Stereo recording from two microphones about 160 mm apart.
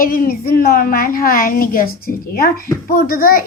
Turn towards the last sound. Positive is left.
turn(degrees=65)  # may be behind; listen again after turning